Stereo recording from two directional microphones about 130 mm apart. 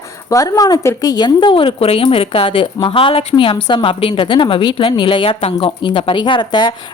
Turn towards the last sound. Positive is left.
turn(degrees=35)  # may be behind; listen again after turning